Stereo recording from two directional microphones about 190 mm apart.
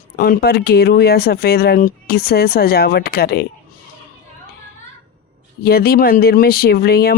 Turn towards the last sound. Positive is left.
turn(degrees=55)  # may be behind; listen again after turning